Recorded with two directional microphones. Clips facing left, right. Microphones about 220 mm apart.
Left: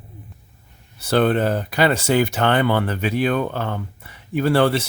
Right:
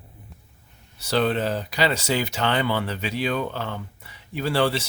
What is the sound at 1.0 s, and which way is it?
Speech, 55° left (ahead or behind).